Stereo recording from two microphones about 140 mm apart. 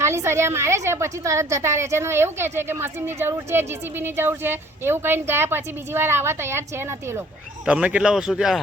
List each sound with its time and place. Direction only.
0.0 s a woman's voice: 20° right (ahead or behind); by 8.6 s 5° right (ahead or behind)